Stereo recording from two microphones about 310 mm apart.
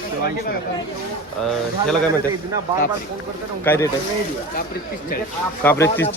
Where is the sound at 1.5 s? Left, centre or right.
Centre.